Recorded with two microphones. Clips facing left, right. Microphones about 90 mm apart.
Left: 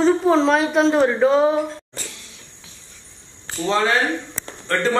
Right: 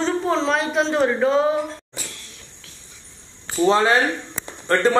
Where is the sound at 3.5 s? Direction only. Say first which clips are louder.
Right 3 dB; 15° right (ahead or behind).